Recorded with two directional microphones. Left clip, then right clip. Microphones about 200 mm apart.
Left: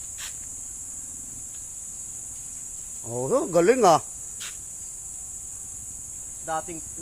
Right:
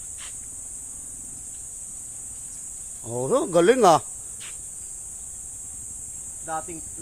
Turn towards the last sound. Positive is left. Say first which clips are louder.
# left 1 dB
turn(degrees=25)  # may be behind; listen again after turning